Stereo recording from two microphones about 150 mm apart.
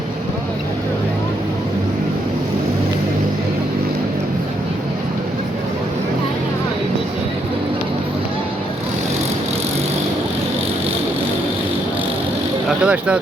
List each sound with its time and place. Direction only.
12.6 s vehicle: 5° right (ahead or behind)